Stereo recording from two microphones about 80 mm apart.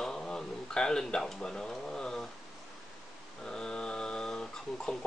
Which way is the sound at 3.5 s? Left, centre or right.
Centre.